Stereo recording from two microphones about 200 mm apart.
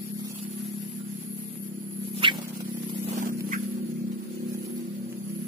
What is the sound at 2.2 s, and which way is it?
Rodents, 25° right (ahead or behind).